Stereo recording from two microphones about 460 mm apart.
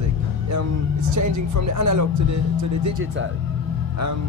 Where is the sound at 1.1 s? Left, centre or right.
Right.